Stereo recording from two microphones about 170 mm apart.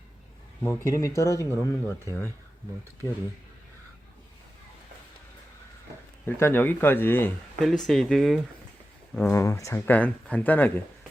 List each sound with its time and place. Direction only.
0.6 s speech: 20° left (ahead or behind)
6.2 s speech: 10° left (ahead or behind)
7.6 s speech: centre (ahead or behind)
9.2 s speech: 15° left (ahead or behind)